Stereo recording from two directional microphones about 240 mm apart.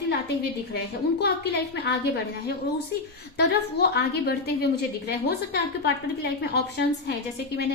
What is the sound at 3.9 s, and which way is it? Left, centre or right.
A woman's voice, left.